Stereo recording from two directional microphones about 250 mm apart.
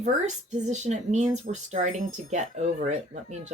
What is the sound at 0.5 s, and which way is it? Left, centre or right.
Speech, right.